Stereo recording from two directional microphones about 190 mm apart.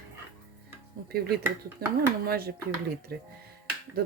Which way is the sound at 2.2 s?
55° right (ahead or behind).